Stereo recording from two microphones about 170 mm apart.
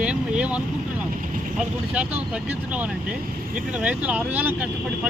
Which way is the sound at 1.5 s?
5° right (ahead or behind).